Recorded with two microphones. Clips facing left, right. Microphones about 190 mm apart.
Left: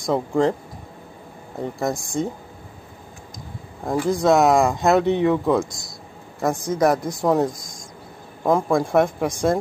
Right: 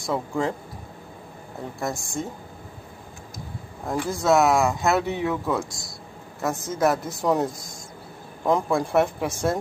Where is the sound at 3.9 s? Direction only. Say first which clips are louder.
Left 6 dB; 15° left (ahead or behind).